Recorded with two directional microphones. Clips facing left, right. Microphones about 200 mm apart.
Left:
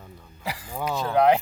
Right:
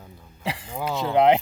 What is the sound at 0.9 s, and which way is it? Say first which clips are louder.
Speech: right 1 dB; 20° right (ahead or behind).